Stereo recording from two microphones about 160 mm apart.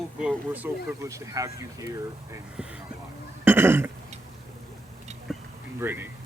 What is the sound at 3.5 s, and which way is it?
Speech, 15° right (ahead or behind).